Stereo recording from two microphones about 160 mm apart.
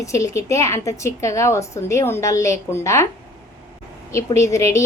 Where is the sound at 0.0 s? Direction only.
20° left (ahead or behind).